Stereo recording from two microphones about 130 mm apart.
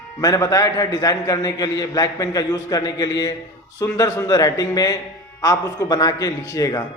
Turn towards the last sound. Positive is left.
turn(degrees=25)  # may be behind; listen again after turning